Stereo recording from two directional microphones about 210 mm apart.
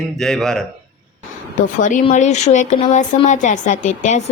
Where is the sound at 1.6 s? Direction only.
40° left (ahead or behind).